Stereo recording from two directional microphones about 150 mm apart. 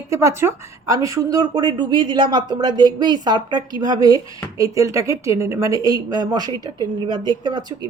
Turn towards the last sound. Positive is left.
turn(degrees=-30)  # may be behind; listen again after turning